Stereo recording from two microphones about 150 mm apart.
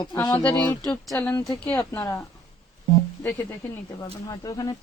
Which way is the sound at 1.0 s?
Centre (ahead or behind).